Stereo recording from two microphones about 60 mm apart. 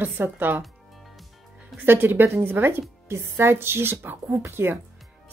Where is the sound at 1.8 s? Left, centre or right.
Right.